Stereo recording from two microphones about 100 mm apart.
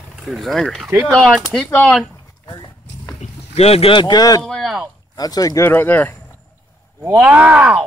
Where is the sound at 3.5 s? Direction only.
90° left.